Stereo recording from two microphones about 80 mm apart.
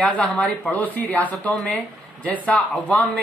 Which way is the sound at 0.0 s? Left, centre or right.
Centre.